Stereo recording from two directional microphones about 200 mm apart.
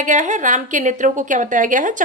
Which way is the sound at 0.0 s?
40° right (ahead or behind).